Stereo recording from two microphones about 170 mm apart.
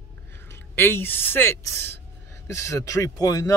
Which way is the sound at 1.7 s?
80° right.